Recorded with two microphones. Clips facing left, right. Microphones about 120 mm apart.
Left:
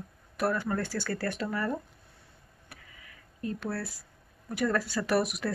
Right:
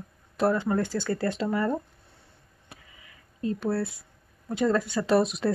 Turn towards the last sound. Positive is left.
turn(degrees=-25)  # may be behind; listen again after turning